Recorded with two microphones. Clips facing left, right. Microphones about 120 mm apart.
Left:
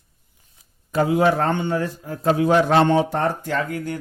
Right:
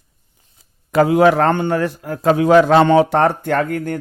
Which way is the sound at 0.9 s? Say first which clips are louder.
Right 6 dB; 75° right (ahead or behind).